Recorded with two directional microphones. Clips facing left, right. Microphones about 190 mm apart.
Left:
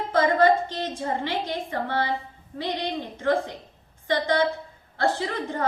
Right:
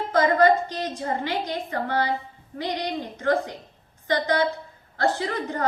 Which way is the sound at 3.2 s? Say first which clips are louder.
Even; 25° left (ahead or behind).